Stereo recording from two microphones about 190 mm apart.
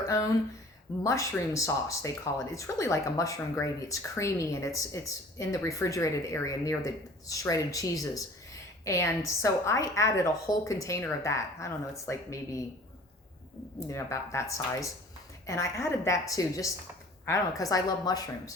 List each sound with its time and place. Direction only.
0.0 s speech: 15° left (ahead or behind)
13.7 s speech: 15° left (ahead or behind)